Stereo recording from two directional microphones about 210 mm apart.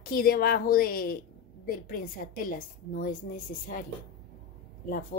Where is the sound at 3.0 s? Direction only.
40° left (ahead or behind).